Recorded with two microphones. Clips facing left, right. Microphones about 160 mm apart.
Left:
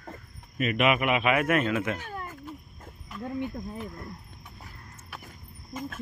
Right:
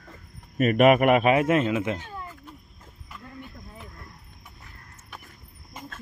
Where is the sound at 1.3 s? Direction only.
25° right (ahead or behind).